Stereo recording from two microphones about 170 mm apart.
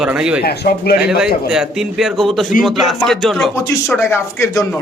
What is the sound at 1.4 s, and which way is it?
Speech, 5° right (ahead or behind).